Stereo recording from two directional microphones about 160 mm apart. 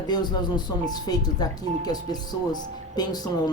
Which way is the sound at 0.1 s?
25° left (ahead or behind).